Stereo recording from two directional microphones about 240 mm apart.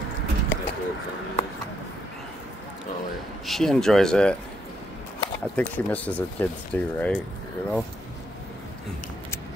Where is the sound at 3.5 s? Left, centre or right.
Centre.